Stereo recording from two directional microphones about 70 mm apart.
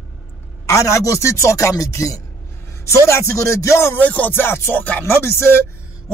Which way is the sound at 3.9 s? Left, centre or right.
Left.